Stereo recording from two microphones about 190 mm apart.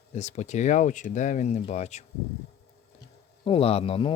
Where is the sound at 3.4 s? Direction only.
30° left (ahead or behind).